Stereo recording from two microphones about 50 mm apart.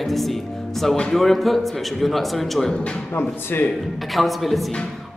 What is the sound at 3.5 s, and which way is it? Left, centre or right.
Speech, left.